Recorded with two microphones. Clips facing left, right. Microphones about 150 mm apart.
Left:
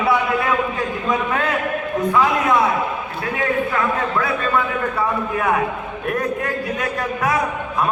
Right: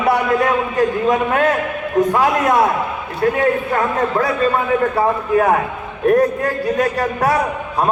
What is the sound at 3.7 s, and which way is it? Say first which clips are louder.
A man's voice: right 3 dB; 40° right (ahead or behind).